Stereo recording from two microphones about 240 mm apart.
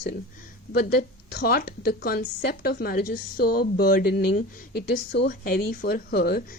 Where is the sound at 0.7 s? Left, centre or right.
Left.